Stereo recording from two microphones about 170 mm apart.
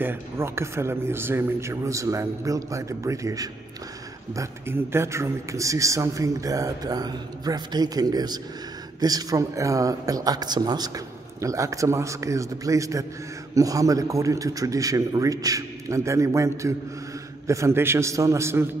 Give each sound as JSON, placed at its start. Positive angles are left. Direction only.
{"t": 0.0, "sound": "a man's voice", "side_deg": -15}